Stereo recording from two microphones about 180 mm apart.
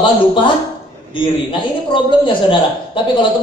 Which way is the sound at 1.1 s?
30° left (ahead or behind).